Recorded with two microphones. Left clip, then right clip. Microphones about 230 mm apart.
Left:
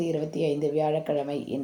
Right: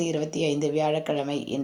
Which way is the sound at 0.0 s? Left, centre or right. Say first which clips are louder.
Right 1 dB; right.